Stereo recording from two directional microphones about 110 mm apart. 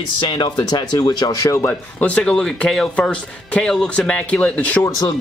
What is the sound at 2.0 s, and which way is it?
Speech, 5° left (ahead or behind).